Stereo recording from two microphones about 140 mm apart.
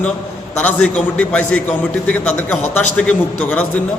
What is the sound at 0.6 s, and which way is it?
A man's voice, 10° left (ahead or behind).